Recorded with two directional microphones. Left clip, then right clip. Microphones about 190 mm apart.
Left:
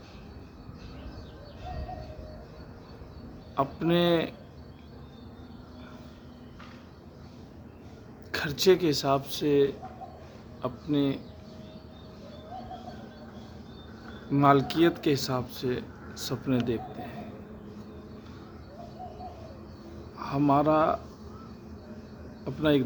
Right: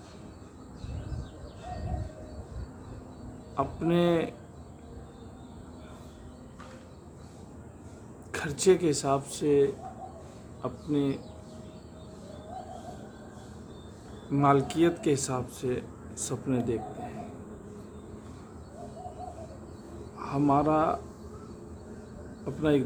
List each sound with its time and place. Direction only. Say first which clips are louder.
3.5 s speech: left 2 dB; 20° left (ahead or behind)
8.3 s a man's voice: left 1 dB; 15° left (ahead or behind)
14.3 s speech: left 2 dB; 20° left (ahead or behind)
20.1 s speech: left 1 dB; 10° left (ahead or behind)
22.4 s speech: left 1 dB; 20° left (ahead or behind)